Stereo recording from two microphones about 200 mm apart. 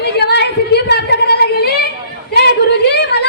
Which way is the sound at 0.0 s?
55° left (ahead or behind).